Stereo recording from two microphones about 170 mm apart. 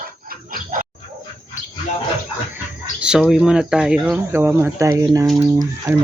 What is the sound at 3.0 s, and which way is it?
Speech, 5° right (ahead or behind).